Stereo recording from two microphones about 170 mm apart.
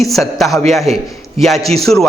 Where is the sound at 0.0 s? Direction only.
Centre (ahead or behind).